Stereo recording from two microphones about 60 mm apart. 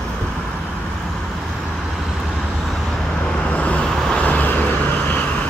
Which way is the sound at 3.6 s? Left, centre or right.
Left.